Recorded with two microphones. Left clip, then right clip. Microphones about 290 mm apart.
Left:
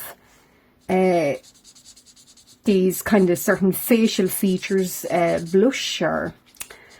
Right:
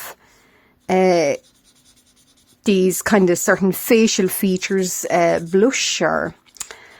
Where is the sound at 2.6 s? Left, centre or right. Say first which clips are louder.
Right 2 dB; right.